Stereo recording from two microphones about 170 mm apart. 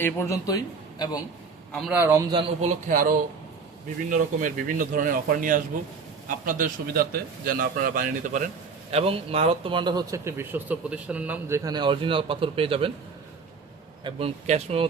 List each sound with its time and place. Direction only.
0.0 s a man's voice: 15° left (ahead or behind)
1.7 s a man's voice: centre (ahead or behind)
2.0 s a man's voice: 15° right (ahead or behind)
2.3 s speech: 30° right (ahead or behind)
2.6 s a man's voice: 55° right (ahead or behind)
8.9 s a man's voice: 35° right (ahead or behind)
14.0 s speech: 35° right (ahead or behind)